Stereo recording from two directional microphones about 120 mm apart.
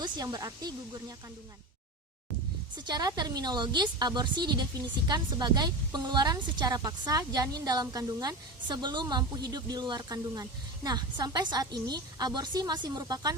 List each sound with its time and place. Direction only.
0.0 s speech: 30° right (ahead or behind)
2.7 s a woman's voice: 35° right (ahead or behind)